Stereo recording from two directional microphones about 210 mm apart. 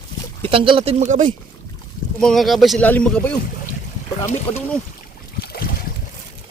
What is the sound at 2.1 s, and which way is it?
Speech, centre (ahead or behind).